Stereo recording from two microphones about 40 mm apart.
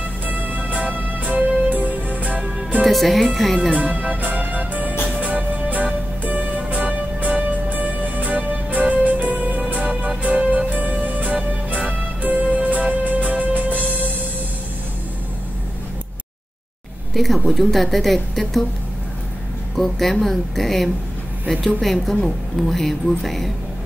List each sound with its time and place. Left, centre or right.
0.3 s music: right
2.8 s a woman's voice: centre
3.7 s music: right
17.1 s a woman's voice: centre
19.8 s a woman's voice: centre